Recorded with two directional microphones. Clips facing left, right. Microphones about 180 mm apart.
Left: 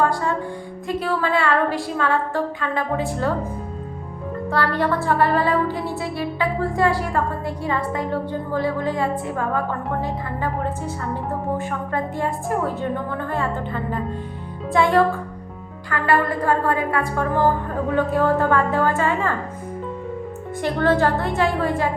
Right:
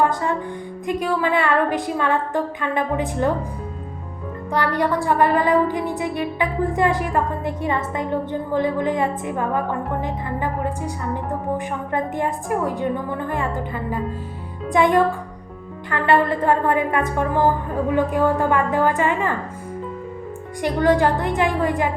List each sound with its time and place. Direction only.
0.0 s music: 20° right (ahead or behind)
0.9 s a woman's voice: 15° right (ahead or behind)
4.5 s a woman's voice: 15° right (ahead or behind)
20.6 s a woman's voice: 15° right (ahead or behind)